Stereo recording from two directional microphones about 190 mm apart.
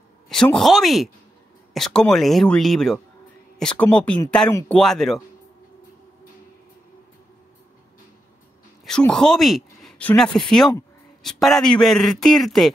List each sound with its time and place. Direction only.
0.3 s speech: 5° left (ahead or behind)
4.5 s speech: 15° left (ahead or behind)
4.7 s speech: centre (ahead or behind)
8.8 s speech: 5° left (ahead or behind)